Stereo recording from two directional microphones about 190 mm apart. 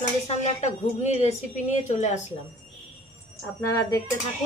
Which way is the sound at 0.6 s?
35° left (ahead or behind).